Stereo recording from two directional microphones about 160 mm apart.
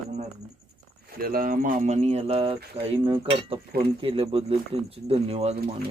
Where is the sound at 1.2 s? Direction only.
65° right (ahead or behind); by 5.5 s 40° right (ahead or behind).